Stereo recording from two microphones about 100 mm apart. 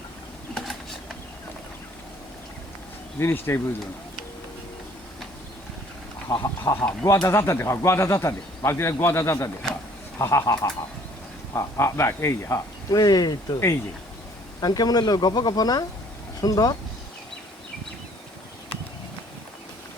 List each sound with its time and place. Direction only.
0.5 s typing: centre (ahead or behind)
3.2 s speech: 25° left (ahead or behind)
6.2 s speech: 30° left (ahead or behind)
6.7 s speech: 15° left (ahead or behind)
11.5 s speech: 30° left (ahead or behind)
14.6 s speech: 40° left (ahead or behind)